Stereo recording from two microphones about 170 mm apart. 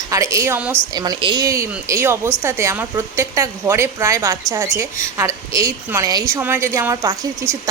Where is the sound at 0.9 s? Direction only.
25° right (ahead or behind).